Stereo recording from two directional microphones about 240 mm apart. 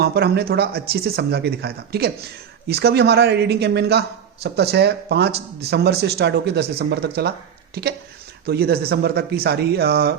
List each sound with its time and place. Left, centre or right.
0.0 s speech: right
8.4 s speech: right